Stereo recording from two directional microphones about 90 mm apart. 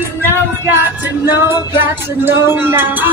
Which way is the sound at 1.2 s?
25° right (ahead or behind).